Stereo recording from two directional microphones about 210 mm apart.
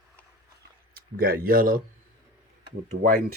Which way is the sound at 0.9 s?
45° right (ahead or behind).